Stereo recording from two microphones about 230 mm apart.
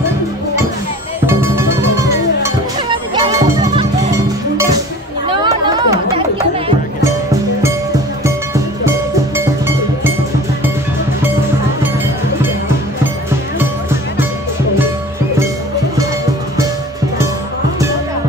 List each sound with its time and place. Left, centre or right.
2.4 s music: centre
5.3 s chatter: centre
8.8 s music: centre